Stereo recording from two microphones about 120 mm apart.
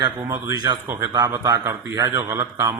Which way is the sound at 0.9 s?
25° right (ahead or behind).